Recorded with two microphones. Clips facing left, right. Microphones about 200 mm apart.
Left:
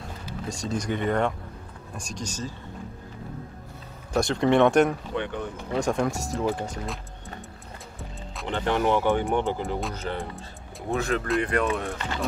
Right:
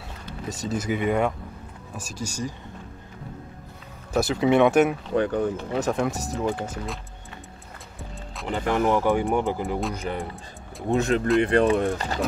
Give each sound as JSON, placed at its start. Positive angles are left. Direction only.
{"t": 0.5, "sound": "speech", "side_deg": -5}
{"t": 4.1, "sound": "speech", "side_deg": -5}
{"t": 5.1, "sound": "speech", "side_deg": -40}
{"t": 5.8, "sound": "speech", "side_deg": 0}
{"t": 8.0, "sound": "speech", "side_deg": 0}
{"t": 9.9, "sound": "speech", "side_deg": -10}